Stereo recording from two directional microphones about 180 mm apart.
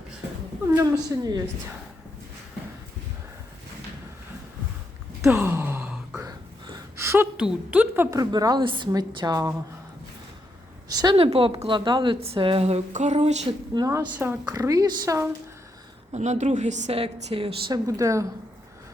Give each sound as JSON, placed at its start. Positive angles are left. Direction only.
{"t": 0.7, "sound": "a woman's voice", "side_deg": -15}
{"t": 5.2, "sound": "gasp", "side_deg": -5}
{"t": 6.2, "sound": "a woman's voice", "side_deg": -20}
{"t": 10.8, "sound": "speech", "side_deg": -20}
{"t": 13.7, "sound": "a woman's voice", "side_deg": -20}
{"t": 16.1, "sound": "speech", "side_deg": -40}
{"t": 17.8, "sound": "a woman's voice", "side_deg": -15}